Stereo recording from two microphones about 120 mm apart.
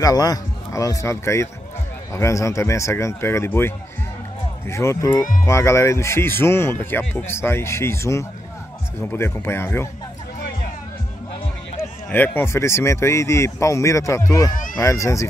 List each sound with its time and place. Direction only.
0.0 s speech: 30° left (ahead or behind)
12.1 s speech: 15° left (ahead or behind)